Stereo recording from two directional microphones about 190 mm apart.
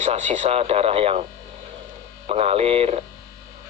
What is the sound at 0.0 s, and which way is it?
Speech, 35° right (ahead or behind).